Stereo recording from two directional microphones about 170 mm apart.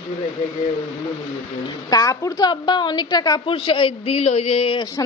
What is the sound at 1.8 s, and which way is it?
A woman's voice, 20° left (ahead or behind).